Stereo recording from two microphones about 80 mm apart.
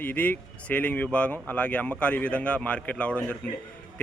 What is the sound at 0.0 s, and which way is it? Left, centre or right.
Speech, left.